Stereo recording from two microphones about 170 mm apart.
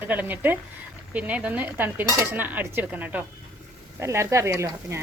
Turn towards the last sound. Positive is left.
turn(degrees=-15)  # may be behind; listen again after turning